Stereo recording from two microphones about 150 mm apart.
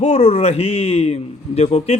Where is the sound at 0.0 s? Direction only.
50° left (ahead or behind).